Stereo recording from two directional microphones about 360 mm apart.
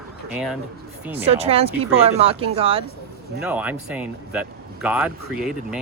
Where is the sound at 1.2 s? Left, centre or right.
Centre.